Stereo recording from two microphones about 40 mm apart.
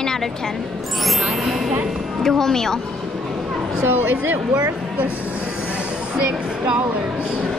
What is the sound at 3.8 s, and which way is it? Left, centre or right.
Speech, right.